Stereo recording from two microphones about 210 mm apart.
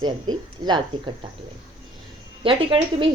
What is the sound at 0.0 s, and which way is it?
A woman's voice, 20° right (ahead or behind).